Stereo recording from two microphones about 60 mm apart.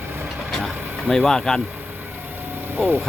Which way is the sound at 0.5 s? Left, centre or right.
Centre.